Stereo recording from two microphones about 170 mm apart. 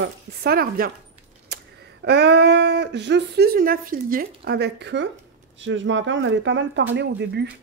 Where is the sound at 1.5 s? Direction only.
70° right (ahead or behind).